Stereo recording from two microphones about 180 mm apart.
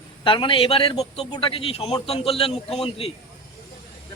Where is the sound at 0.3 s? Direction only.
30° left (ahead or behind).